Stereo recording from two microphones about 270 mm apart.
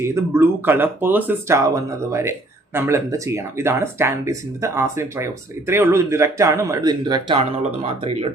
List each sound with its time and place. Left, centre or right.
0.0 s speech: centre